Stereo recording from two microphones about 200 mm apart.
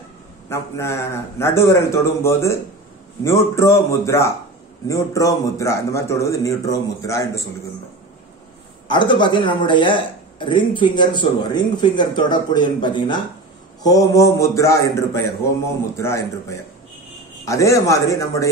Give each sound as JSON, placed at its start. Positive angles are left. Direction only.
{"t": 0.5, "sound": "a man's voice", "side_deg": 15}
{"t": 8.8, "sound": "a man's voice", "side_deg": 25}